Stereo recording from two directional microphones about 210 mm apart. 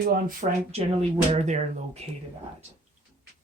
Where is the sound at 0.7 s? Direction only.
30° right (ahead or behind).